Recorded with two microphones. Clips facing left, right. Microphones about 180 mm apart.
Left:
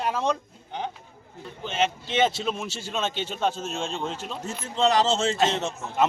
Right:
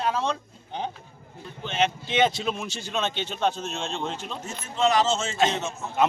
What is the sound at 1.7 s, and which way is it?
A man's voice, 5° left (ahead or behind).